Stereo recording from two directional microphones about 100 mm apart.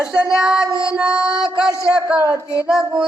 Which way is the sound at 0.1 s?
10° right (ahead or behind).